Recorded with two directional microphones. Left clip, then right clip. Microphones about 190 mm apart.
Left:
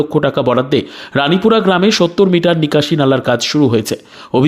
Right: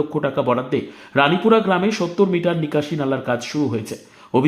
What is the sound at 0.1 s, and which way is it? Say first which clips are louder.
Speech: left 7 dB; 40° left (ahead or behind).